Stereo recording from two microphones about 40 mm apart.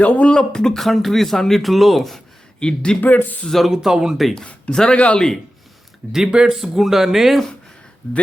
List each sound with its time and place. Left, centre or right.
0.0 s speech: left
0.3 s speech: centre
0.8 s speech: centre
2.6 s speech: left
3.0 s speech: left
3.4 s speech: centre
3.7 s speech: centre
4.7 s speech: centre
4.9 s speech: left
6.1 s speech: centre
6.6 s speech: centre
8.0 s speech: centre